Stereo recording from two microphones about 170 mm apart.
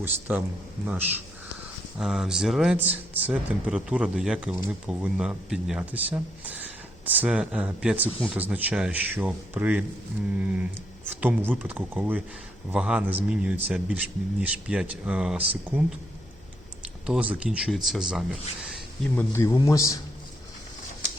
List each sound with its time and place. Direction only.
0.0 s speech: 10° right (ahead or behind)
17.1 s speech: 10° right (ahead or behind)
19.1 s a man's voice: 15° left (ahead or behind)